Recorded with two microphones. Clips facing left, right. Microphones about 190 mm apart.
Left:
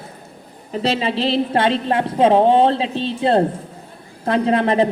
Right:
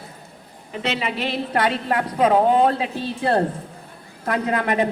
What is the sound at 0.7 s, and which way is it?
A woman's voice, 35° left (ahead or behind).